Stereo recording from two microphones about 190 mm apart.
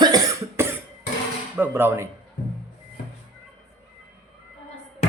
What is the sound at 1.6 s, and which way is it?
Speech, 10° right (ahead or behind).